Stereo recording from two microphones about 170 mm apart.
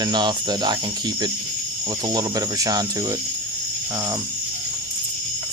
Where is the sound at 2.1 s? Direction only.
20° right (ahead or behind).